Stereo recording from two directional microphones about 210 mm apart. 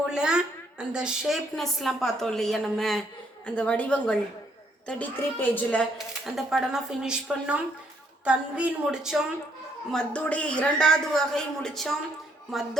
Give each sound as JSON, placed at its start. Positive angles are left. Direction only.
{"t": 0.1, "sound": "a woman's voice", "side_deg": -5}